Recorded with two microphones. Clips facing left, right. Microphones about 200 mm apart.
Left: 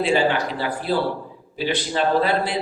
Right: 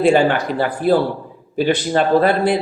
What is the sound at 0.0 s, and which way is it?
Speech, 50° right (ahead or behind).